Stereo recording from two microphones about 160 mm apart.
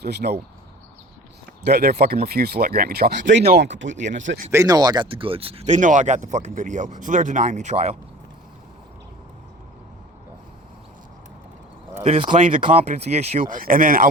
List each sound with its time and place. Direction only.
0.0 s speech: 90° right
1.6 s speech: 75° right (ahead or behind)
4.5 s speech: 25° right (ahead or behind); by 7.9 s 45° right (ahead or behind)
11.9 s speech: 40° right (ahead or behind)
13.4 s speech: 60° right (ahead or behind)